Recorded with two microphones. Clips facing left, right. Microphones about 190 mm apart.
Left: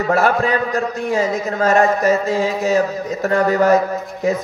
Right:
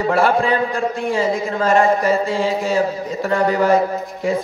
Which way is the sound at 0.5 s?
40° left (ahead or behind).